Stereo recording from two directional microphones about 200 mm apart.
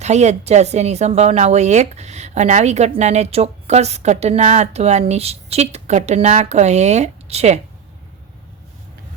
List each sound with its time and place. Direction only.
0.0 s speech: 35° right (ahead or behind)